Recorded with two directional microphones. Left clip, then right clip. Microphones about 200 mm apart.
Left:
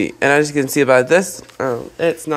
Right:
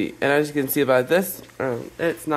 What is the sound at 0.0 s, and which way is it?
Speech, 5° left (ahead or behind).